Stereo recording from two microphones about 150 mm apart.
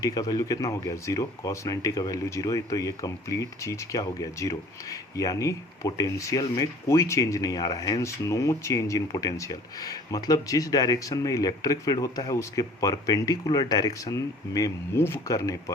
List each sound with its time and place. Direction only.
0.0 s speech: 25° left (ahead or behind)